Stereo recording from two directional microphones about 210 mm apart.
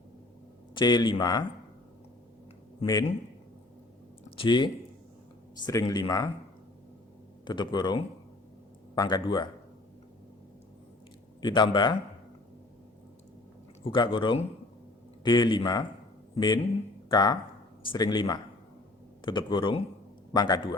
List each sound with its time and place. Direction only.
0.7 s a man's voice: 20° left (ahead or behind)
2.8 s speech: 20° left (ahead or behind)
4.4 s a man's voice: 25° left (ahead or behind)
7.4 s a man's voice: 20° left (ahead or behind)
11.3 s a man's voice: 20° left (ahead or behind)
13.8 s a man's voice: 25° left (ahead or behind)